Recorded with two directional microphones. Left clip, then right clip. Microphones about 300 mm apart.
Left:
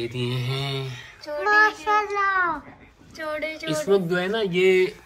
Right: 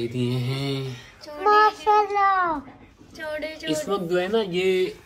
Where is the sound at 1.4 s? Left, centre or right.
Centre.